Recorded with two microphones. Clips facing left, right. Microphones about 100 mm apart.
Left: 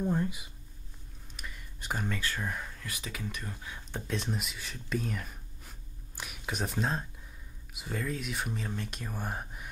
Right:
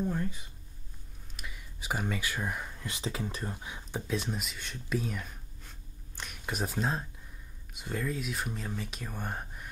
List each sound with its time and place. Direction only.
0.0 s speech: 15° left (ahead or behind)
1.3 s speech: 5° right (ahead or behind)
4.1 s speech: centre (ahead or behind)